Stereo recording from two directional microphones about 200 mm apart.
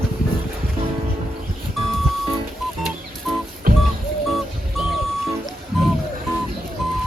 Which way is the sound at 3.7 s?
50° right (ahead or behind).